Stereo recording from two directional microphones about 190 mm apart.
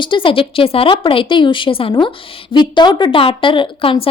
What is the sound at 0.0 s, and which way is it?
Speech, 25° left (ahead or behind).